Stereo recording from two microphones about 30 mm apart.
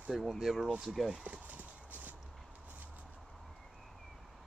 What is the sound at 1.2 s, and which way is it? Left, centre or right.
Clip-clop, right.